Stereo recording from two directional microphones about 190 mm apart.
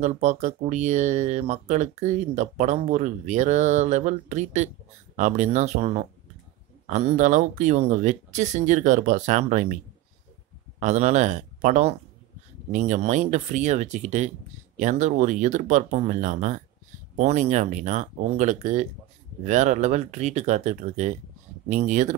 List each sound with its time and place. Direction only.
0.0 s speech: 35° right (ahead or behind)
10.8 s speech: 40° right (ahead or behind)